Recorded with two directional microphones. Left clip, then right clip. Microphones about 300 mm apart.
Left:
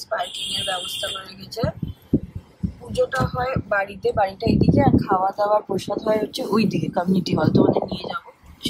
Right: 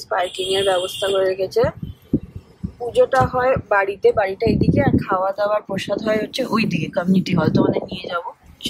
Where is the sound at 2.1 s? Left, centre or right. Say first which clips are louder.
Even; centre.